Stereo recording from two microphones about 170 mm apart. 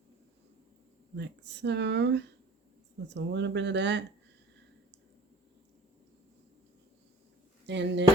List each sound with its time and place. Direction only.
1.1 s speech: 90° right
7.7 s speech: 90° right